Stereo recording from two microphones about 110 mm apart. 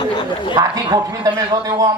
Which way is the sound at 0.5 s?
35° right (ahead or behind).